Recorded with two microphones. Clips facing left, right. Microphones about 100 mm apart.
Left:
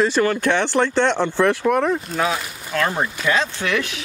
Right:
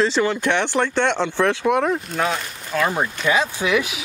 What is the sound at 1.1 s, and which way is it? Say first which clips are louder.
Speech: left 2 dB; 15° left (ahead or behind).